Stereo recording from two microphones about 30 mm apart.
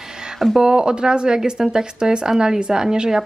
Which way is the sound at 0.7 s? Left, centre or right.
Right.